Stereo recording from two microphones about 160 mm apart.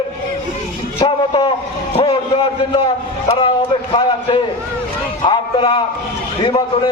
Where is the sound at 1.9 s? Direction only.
40° left (ahead or behind).